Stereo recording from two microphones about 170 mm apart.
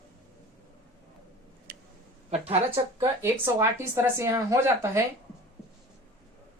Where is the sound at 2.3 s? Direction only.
35° right (ahead or behind).